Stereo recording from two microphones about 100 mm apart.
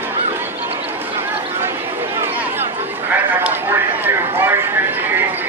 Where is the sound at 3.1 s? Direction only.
20° right (ahead or behind).